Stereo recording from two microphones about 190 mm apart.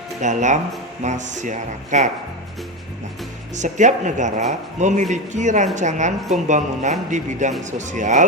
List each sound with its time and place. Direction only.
0.2 s speech: 40° right (ahead or behind)
3.5 s speech: 40° right (ahead or behind)